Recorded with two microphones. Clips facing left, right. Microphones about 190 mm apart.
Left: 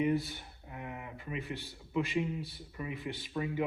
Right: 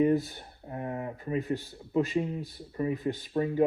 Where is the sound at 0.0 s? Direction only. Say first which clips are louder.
Right 6 dB; 40° right (ahead or behind).